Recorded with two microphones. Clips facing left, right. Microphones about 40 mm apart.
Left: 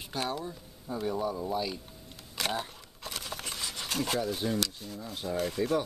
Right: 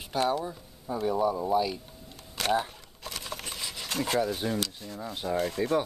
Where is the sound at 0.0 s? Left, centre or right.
Centre.